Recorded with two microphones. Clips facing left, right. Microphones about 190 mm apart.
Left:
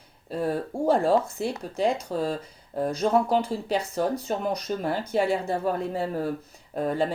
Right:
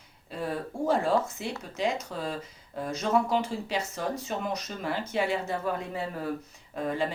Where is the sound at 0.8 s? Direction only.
35° left (ahead or behind).